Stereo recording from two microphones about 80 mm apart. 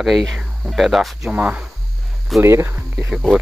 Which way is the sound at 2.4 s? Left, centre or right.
Right.